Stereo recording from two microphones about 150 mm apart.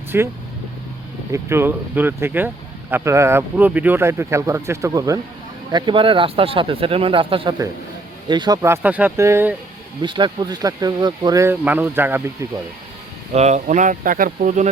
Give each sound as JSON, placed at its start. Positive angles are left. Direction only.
{"t": 0.1, "sound": "speech", "side_deg": -15}
{"t": 5.7, "sound": "speech", "side_deg": -35}
{"t": 8.6, "sound": "speech", "side_deg": -15}
{"t": 10.0, "sound": "speech", "side_deg": -30}
{"t": 11.6, "sound": "speech", "side_deg": -10}
{"t": 13.3, "sound": "speech", "side_deg": -50}